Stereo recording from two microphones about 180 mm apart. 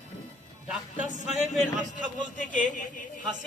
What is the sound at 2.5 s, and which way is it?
Speech, 45° left (ahead or behind).